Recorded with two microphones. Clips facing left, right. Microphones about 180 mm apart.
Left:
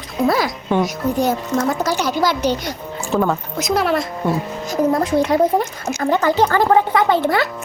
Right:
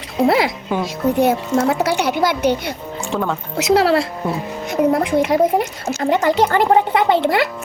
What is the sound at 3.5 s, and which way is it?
Speech, 75° right (ahead or behind).